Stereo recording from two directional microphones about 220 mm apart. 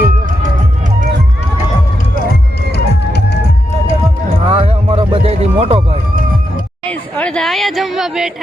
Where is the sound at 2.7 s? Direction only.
50° left (ahead or behind).